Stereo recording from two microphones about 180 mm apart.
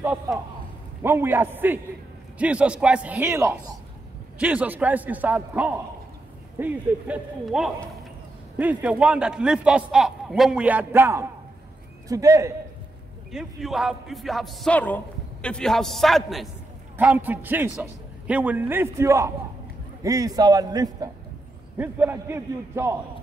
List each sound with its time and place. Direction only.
0.0 s a man's voice: 10° right (ahead or behind)
13.3 s a man's voice: centre (ahead or behind)